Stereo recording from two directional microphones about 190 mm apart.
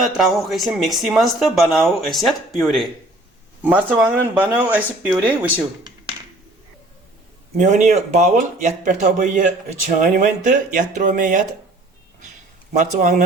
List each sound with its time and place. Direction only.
0.0 s speech: centre (ahead or behind)
7.5 s speech: 40° right (ahead or behind)
12.7 s speech: 45° right (ahead or behind)